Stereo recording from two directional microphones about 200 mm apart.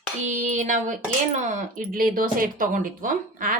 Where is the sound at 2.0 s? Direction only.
45° right (ahead or behind).